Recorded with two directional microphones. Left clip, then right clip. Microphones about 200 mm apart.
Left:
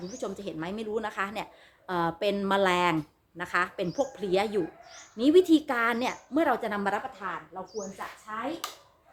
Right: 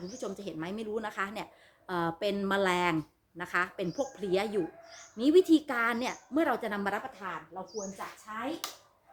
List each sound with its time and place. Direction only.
0.2 s speech: 20° left (ahead or behind)